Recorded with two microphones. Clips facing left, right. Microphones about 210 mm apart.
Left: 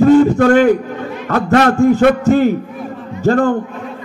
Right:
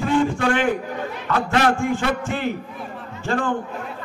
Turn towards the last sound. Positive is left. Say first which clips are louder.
# left 10 dB
turn(degrees=40)  # may be behind; listen again after turning